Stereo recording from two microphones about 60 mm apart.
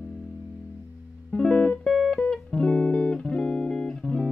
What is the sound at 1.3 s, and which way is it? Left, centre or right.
Music, centre.